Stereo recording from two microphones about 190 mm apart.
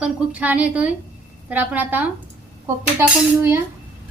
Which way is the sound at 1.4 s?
10° right (ahead or behind).